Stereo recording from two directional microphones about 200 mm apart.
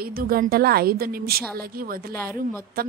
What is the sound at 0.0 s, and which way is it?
A woman's voice, 50° right (ahead or behind).